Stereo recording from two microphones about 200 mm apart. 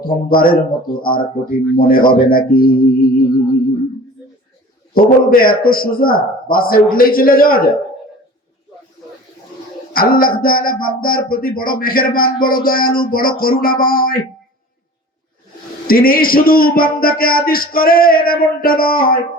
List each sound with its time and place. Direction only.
0.0 s a man's voice: 45° left (ahead or behind)
4.9 s a man's voice: 45° left (ahead or behind)
9.9 s a sound: 45° left (ahead or behind)
10.4 s a man's voice: 45° left (ahead or behind)
15.9 s a man's voice: 45° left (ahead or behind)